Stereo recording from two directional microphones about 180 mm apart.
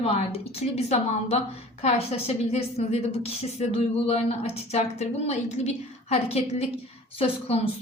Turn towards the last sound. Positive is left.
turn(degrees=35)  # may be behind; listen again after turning